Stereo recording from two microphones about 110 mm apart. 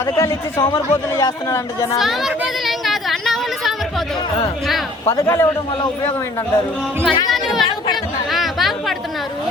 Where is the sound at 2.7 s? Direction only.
Centre (ahead or behind).